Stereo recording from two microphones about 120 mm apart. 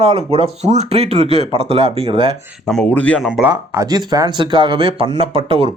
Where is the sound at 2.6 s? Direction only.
10° left (ahead or behind).